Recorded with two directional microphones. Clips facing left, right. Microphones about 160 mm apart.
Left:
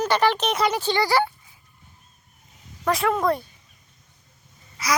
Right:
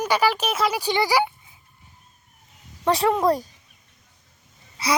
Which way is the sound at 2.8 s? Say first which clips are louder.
Right 2 dB; 35° right (ahead or behind).